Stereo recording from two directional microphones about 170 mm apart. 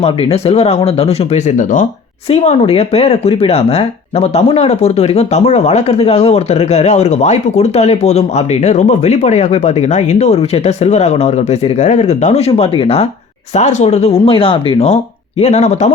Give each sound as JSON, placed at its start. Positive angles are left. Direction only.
{"t": 0.0, "sound": "speech", "side_deg": 35}